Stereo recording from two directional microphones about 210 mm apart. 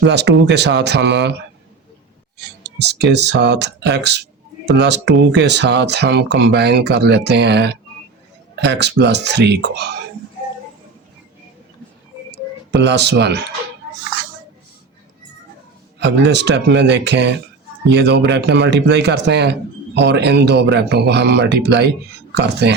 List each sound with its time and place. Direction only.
0.0 s speech: 55° right (ahead or behind)
2.4 s speech: 55° right (ahead or behind)
12.3 s a sound: 55° right (ahead or behind)
16.0 s speech: 55° right (ahead or behind)